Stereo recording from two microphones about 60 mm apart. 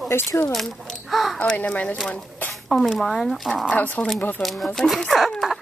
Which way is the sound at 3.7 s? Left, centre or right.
Left.